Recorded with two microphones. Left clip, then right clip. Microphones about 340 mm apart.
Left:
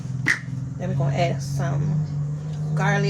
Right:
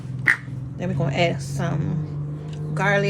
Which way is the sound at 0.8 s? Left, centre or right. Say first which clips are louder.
Right 2 dB; right.